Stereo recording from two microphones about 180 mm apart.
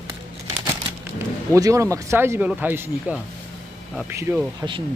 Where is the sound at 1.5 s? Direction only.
15° right (ahead or behind).